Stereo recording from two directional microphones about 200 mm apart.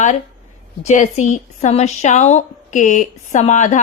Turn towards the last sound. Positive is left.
turn(degrees=35)  # may be behind; listen again after turning